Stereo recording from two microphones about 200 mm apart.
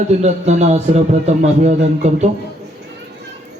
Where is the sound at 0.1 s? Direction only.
35° right (ahead or behind).